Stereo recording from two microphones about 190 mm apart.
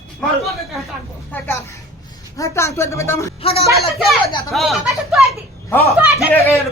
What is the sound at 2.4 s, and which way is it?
Speech, 15° left (ahead or behind).